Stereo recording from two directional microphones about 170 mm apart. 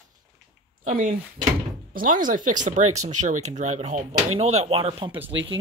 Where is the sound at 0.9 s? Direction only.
50° right (ahead or behind); by 5.1 s 35° right (ahead or behind).